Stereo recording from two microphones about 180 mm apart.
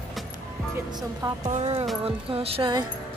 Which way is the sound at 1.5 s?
35° right (ahead or behind).